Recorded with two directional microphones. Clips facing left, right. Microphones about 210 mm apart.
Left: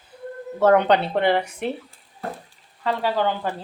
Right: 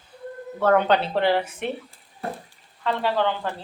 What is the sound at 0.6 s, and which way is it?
Speech, 15° left (ahead or behind).